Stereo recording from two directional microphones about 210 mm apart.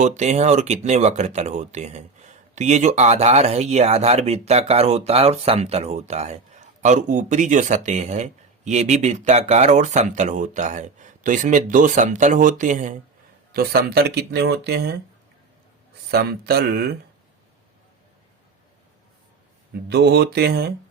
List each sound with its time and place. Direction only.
0.0 s speech: 35° right (ahead or behind)
13.5 s speech: 50° right (ahead or behind)
16.1 s speech: 50° right (ahead or behind)
19.9 s speech: 50° right (ahead or behind)